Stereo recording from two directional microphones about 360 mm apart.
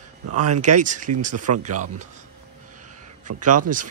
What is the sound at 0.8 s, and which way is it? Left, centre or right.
Speech, right.